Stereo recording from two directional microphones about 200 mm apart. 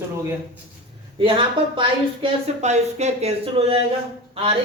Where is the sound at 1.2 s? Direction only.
25° right (ahead or behind).